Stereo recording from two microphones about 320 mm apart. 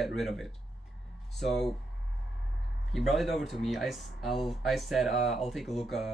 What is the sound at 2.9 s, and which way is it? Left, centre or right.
Speech, centre.